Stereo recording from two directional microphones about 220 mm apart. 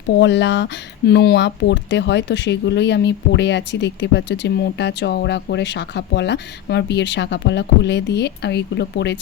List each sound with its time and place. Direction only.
0.2 s speech: 55° left (ahead or behind)